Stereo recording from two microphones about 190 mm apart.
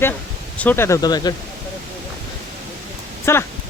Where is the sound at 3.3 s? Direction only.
15° left (ahead or behind).